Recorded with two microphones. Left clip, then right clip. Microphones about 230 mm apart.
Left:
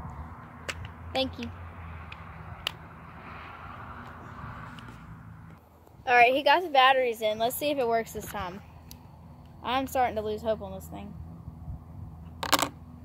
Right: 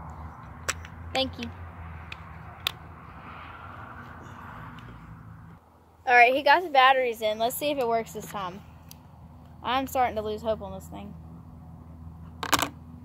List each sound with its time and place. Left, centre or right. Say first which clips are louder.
1.1 s a woman's voice: right 2 dB; centre
3.3 s vehicle: even; left
6.0 s a woman's voice: right 2 dB; centre
9.6 s a woman's voice: right 1 dB; centre
12.4 s camera: even; centre